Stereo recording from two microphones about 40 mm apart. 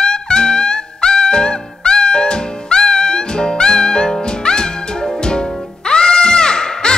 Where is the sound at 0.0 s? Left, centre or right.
Left.